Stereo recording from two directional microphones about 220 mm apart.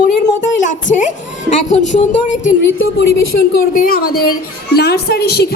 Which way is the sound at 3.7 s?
40° left (ahead or behind).